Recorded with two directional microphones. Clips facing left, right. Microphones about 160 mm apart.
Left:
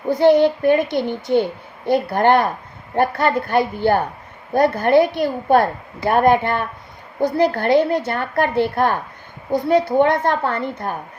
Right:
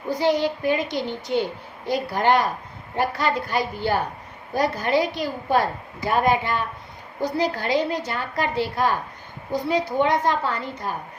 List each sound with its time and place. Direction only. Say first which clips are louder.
0.1 s a woman's voice: left 8 dB; 55° left (ahead or behind)